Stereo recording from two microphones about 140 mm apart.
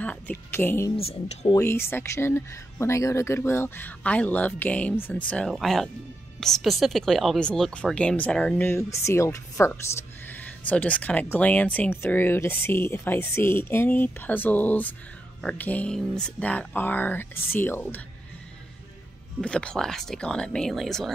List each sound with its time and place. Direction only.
0.0 s speech: 10° left (ahead or behind)
0.9 s speech: 45° left (ahead or behind)
1.6 s speech: 15° left (ahead or behind)
19.4 s speech: 5° left (ahead or behind)